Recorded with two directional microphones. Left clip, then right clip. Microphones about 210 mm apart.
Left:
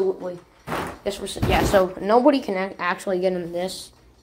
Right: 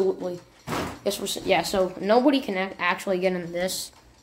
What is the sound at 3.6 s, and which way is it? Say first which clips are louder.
Speech: right 1 dB; 30° right (ahead or behind).